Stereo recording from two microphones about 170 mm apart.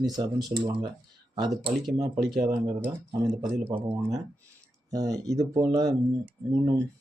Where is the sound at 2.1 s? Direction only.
Centre (ahead or behind).